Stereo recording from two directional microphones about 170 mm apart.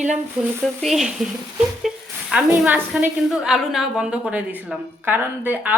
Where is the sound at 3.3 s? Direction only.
Centre (ahead or behind).